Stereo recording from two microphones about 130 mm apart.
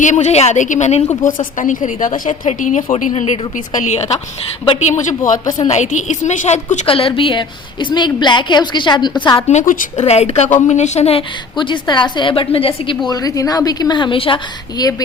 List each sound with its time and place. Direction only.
0.0 s a woman's voice: 65° left (ahead or behind)
3.1 s a woman's voice: 60° left (ahead or behind)
4.8 s a woman's voice: 65° left (ahead or behind)
6.8 s a woman's voice: 45° left (ahead or behind)
9.5 s a woman's voice: 80° left
10.1 s a woman's voice: 55° left (ahead or behind)
11.5 s a woman's voice: 40° left (ahead or behind)
13.1 s a woman's voice: 25° left (ahead or behind)